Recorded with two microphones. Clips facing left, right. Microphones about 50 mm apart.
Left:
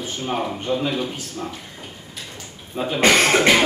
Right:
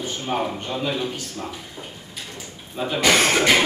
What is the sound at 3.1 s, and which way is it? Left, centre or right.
Speech, left.